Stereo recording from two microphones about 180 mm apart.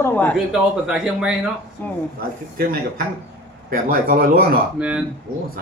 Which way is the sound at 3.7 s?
50° right (ahead or behind).